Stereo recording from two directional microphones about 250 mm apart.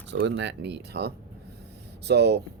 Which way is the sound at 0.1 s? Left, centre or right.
Right.